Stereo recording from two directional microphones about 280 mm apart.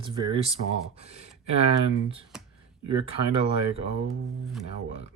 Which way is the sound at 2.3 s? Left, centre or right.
Centre.